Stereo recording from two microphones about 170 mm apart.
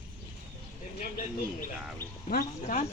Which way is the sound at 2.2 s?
50° left (ahead or behind).